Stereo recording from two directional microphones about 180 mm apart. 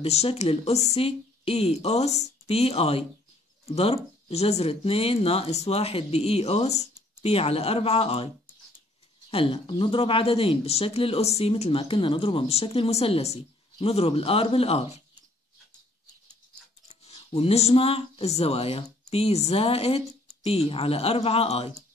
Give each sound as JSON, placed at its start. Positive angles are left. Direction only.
{"t": 0.0, "sound": "speech", "side_deg": 35}
{"t": 9.3, "sound": "speech", "side_deg": 30}
{"t": 17.0, "sound": "speech", "side_deg": 35}